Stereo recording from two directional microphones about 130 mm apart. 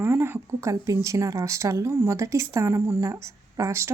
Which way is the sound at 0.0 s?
15° right (ahead or behind).